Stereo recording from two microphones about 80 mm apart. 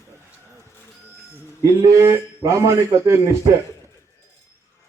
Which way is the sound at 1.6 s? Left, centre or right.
Right.